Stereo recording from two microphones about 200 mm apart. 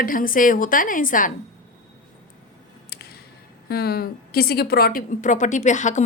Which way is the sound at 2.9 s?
50° left (ahead or behind).